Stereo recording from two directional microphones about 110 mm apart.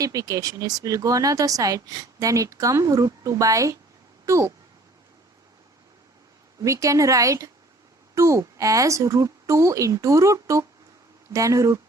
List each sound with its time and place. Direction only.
0.0 s a woman's voice: 30° right (ahead or behind)
6.6 s a woman's voice: 30° right (ahead or behind)